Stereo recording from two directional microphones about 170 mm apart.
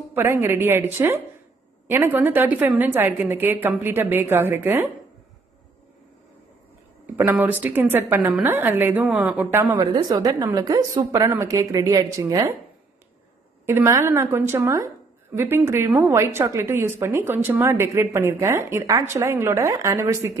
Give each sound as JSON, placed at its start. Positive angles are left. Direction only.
{"t": 0.1, "sound": "a woman's voice", "side_deg": -15}
{"t": 7.2, "sound": "a woman's voice", "side_deg": -10}
{"t": 9.8, "sound": "a woman's voice", "side_deg": -25}
{"t": 13.7, "sound": "a woman's voice", "side_deg": -15}